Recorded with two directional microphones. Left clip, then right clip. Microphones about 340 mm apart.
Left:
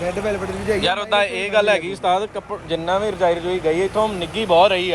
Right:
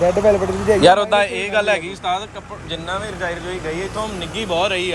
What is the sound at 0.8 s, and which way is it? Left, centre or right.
Speech, centre.